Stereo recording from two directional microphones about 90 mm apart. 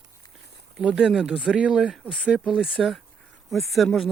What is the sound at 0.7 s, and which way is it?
Speech, 10° right (ahead or behind).